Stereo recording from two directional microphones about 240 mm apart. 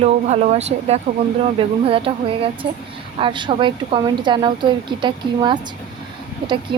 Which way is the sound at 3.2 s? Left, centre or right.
Centre.